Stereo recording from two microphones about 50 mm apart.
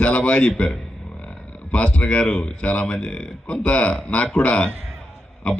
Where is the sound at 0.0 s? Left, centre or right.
Left.